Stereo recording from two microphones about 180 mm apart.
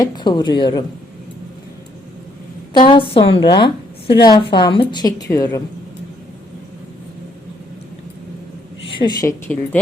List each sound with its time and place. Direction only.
0.0 s a woman's voice: 25° left (ahead or behind)
2.7 s a woman's voice: 25° left (ahead or behind)
9.0 s a woman's voice: 25° left (ahead or behind)